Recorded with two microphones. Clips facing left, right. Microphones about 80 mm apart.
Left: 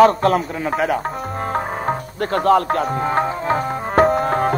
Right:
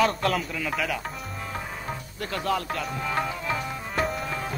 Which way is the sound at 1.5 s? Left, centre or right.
Left.